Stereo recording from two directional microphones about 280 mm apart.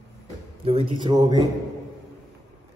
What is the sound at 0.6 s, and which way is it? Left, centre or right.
Speech, centre.